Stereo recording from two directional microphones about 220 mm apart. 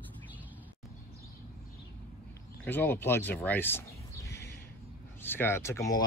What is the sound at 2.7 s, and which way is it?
Speech, 10° left (ahead or behind).